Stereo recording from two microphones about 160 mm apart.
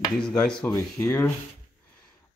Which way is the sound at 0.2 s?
5° left (ahead or behind).